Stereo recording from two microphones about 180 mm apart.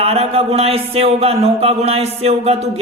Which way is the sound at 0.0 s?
35° right (ahead or behind).